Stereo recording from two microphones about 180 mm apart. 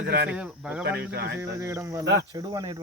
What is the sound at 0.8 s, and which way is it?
Speech, 60° right (ahead or behind).